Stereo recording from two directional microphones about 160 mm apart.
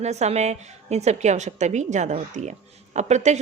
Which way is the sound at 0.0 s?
45° right (ahead or behind).